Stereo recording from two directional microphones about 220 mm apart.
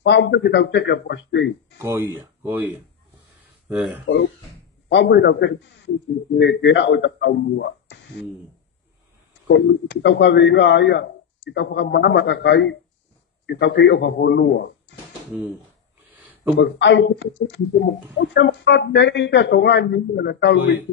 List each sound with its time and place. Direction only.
0.0 s speech: 50° left (ahead or behind)
1.8 s speech: 10° right (ahead or behind)
3.6 s speech: 5° right (ahead or behind)
4.9 s speech: 50° left (ahead or behind)
9.5 s speech: 55° left (ahead or behind)
16.5 s speech: 50° left (ahead or behind)